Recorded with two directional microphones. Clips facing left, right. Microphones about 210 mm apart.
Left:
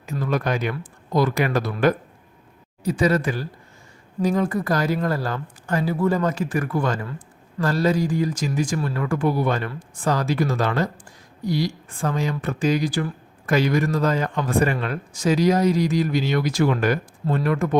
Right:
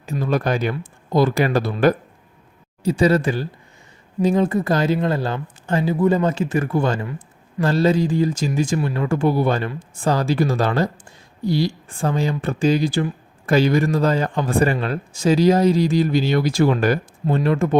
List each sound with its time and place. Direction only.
0.0 s speech: 30° right (ahead or behind)